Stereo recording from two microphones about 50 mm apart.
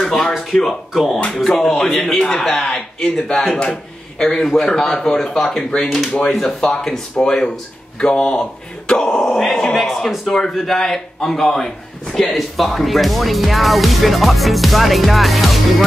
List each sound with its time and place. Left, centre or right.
0.0 s a sound: centre
0.4 s a man's voice: centre
5.6 s speech: centre
6.3 s a man's voice: centre